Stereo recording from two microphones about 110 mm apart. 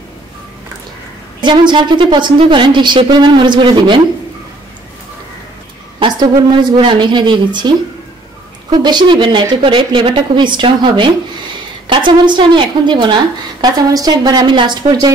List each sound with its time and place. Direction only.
1.4 s a woman's voice: 45° right (ahead or behind)
5.9 s a woman's voice: 45° right (ahead or behind)